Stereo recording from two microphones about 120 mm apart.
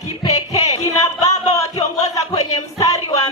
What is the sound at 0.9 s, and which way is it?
Speech, 30° left (ahead or behind).